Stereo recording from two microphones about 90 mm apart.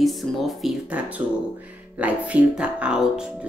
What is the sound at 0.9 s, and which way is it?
Speech, 15° right (ahead or behind).